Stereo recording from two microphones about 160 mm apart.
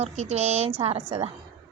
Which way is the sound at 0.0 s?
40° right (ahead or behind).